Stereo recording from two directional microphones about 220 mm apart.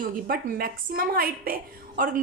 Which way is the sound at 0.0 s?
40° right (ahead or behind).